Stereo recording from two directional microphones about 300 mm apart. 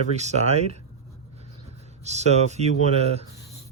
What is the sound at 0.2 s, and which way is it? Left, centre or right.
Speech, right.